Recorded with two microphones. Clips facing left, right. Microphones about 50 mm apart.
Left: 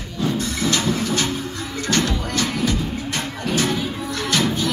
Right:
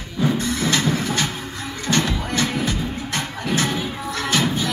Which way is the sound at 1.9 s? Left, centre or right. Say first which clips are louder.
Even; right.